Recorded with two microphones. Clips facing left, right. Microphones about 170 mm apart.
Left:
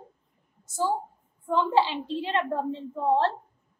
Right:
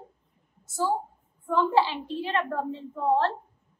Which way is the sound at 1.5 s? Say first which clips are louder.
Even; 20° left (ahead or behind).